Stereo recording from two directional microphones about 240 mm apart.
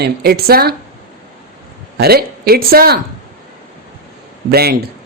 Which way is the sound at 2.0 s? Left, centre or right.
Right.